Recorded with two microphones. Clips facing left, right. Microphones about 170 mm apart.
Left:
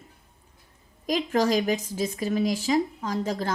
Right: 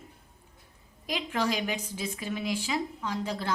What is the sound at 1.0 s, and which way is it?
Speech, 40° left (ahead or behind).